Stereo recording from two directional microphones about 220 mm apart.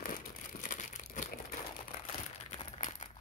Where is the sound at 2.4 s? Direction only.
30° left (ahead or behind).